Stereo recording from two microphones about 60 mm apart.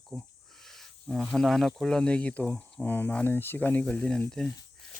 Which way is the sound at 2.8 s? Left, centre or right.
Left.